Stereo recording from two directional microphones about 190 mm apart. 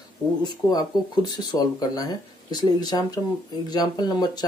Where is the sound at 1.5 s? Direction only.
20° left (ahead or behind).